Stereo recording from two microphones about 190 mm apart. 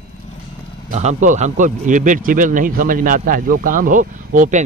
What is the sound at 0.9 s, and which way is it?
Speech, 40° right (ahead or behind).